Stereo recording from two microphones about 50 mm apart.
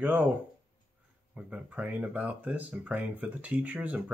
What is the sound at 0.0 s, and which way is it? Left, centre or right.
Speech, right.